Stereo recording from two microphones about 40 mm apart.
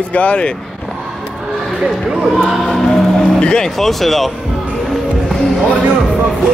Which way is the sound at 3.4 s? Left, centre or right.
Left.